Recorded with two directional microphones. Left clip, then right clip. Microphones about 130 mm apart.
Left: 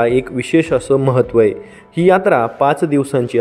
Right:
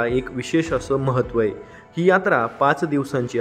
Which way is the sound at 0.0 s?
30° left (ahead or behind).